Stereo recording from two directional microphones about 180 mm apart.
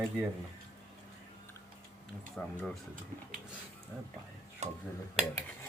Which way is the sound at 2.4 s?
Centre (ahead or behind).